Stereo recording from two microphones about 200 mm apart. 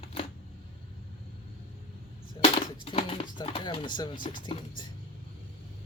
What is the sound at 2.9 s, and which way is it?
Speech, 30° left (ahead or behind).